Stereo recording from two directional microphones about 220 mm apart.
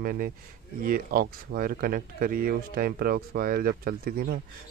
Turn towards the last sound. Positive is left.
turn(degrees=-40)  # may be behind; listen again after turning